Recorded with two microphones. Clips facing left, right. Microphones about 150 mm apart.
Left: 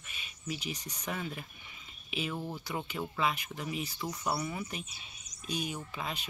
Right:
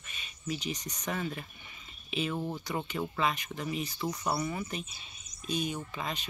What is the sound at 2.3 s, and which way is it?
Speech, 15° right (ahead or behind).